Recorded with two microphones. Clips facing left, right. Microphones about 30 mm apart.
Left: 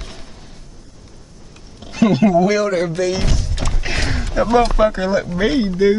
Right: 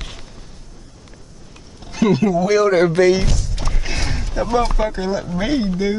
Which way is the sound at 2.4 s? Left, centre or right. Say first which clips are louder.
Right 1 dB; centre.